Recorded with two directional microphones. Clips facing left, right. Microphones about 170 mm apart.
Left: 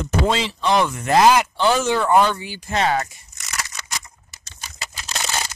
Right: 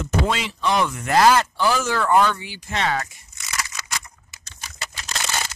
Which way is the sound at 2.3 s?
40° left (ahead or behind).